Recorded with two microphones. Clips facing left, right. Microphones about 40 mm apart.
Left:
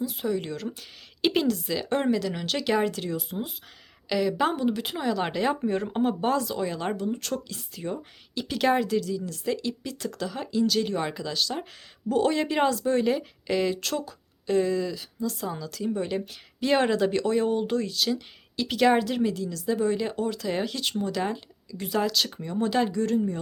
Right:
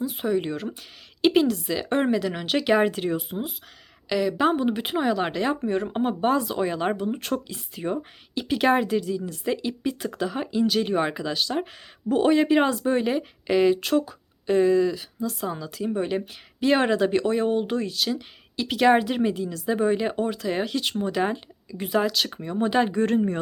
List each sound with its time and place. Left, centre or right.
0.0 s speech: centre
1.2 s speech: centre; by 3.3 s right
4.1 s a woman's voice: centre
4.5 s speech: right
5.1 s speech: centre; by 20.4 s right
20.4 s speech: centre
21.0 s speech: right
22.9 s speech: right